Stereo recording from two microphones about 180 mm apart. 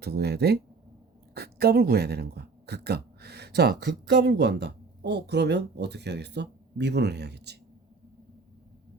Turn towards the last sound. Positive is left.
turn(degrees=-65)  # may be behind; listen again after turning